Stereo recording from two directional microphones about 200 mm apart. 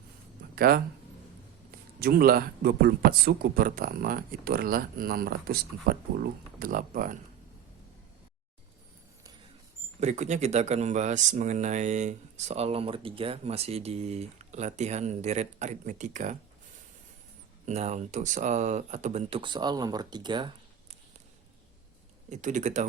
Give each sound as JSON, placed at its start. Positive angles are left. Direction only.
{"t": 0.5, "sound": "speech", "side_deg": -50}
{"t": 2.0, "sound": "speech", "side_deg": -50}
{"t": 10.0, "sound": "speech", "side_deg": -35}
{"t": 17.7, "sound": "speech", "side_deg": -35}
{"t": 22.3, "sound": "speech", "side_deg": -40}